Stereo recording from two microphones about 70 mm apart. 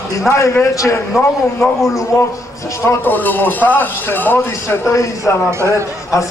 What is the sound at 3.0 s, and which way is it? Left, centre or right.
Speech, left.